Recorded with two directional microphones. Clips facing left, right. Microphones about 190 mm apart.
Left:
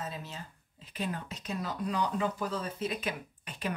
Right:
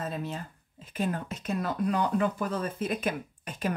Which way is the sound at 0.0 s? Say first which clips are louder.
Right 6 dB; 55° right (ahead or behind).